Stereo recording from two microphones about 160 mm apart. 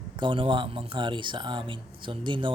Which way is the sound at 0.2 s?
30° right (ahead or behind).